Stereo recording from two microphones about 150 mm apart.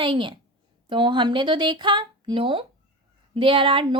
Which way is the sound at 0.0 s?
35° right (ahead or behind).